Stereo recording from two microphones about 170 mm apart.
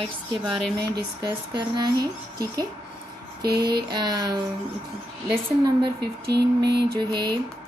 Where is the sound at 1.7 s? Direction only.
25° right (ahead or behind).